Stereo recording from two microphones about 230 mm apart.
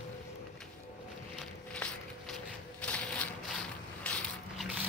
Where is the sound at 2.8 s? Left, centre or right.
Centre.